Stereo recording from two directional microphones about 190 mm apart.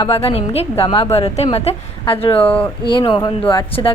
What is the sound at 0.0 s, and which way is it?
A woman's voice, 30° left (ahead or behind).